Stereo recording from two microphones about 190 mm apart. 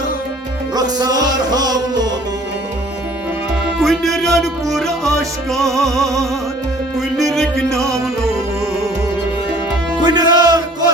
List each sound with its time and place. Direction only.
0.8 s music: 20° right (ahead or behind)
3.8 s music: centre (ahead or behind)
10.0 s music: 20° right (ahead or behind)